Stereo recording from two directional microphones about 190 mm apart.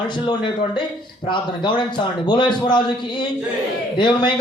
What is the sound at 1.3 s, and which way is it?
A man's voice, 25° left (ahead or behind).